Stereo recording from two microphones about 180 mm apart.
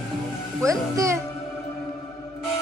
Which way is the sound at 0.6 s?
15° right (ahead or behind).